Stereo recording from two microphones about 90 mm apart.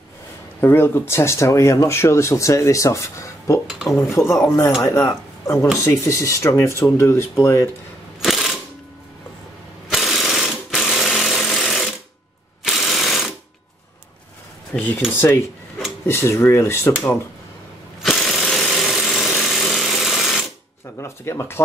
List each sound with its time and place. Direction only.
0.6 s speech: 25° left (ahead or behind)
8.2 s a sound: centre (ahead or behind)
9.8 s jackhammer: centre (ahead or behind)
12.6 s ratchet: centre (ahead or behind)
14.7 s speech: 20° left (ahead or behind)
18.0 s jackhammer: centre (ahead or behind)
18.8 s sewing machine: centre (ahead or behind)
21.0 s speech: 30° left (ahead or behind)